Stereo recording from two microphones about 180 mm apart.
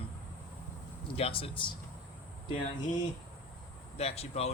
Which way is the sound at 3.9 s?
35° left (ahead or behind).